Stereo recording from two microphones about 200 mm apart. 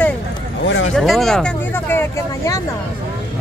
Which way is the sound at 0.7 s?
70° left (ahead or behind).